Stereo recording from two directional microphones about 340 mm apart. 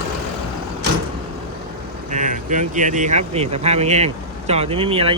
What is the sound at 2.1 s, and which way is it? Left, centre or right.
Speech, right.